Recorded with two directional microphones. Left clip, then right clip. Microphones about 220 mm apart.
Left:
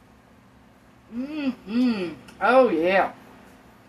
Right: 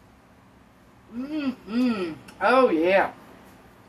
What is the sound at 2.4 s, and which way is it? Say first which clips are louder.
Speech: left 1 dB; 25° left (ahead or behind).